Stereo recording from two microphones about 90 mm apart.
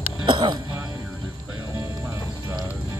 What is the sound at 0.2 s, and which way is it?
Speech, 55° right (ahead or behind).